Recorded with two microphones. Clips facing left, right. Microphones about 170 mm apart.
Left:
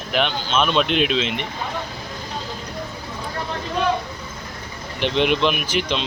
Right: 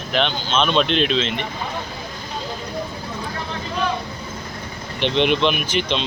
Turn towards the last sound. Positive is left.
turn(degrees=5)  # may be behind; listen again after turning